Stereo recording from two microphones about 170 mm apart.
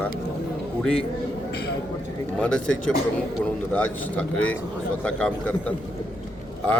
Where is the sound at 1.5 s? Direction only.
75° left (ahead or behind).